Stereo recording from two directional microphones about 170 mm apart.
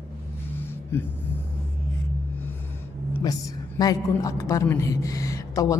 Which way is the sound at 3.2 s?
20° left (ahead or behind).